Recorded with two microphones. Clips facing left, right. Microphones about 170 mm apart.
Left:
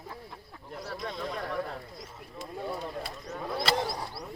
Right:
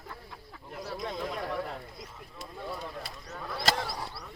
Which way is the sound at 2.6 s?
20° left (ahead or behind).